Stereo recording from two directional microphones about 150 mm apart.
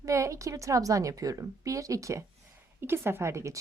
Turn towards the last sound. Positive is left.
turn(degrees=-20)  # may be behind; listen again after turning